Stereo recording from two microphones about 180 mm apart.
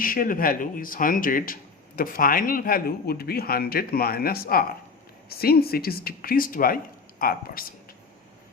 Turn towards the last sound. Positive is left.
turn(degrees=55)  # may be behind; listen again after turning